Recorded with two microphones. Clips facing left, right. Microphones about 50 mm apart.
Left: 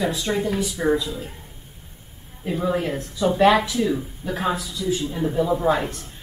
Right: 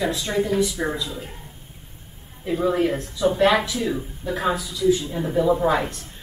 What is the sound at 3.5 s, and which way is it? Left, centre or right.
Speech, centre.